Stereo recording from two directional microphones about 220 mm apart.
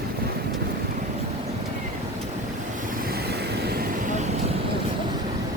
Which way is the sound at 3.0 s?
45° right (ahead or behind).